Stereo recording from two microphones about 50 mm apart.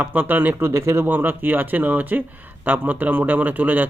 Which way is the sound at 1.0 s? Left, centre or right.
Right.